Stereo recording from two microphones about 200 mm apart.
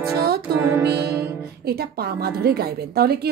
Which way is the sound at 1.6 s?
50° right (ahead or behind).